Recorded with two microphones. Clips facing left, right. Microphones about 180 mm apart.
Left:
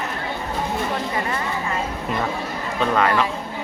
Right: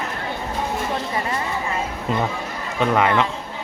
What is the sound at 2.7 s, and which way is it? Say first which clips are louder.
Speech: right 1 dB; 15° right (ahead or behind).